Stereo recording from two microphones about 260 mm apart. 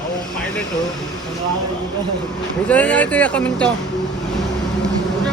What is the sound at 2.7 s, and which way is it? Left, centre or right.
Speech, centre.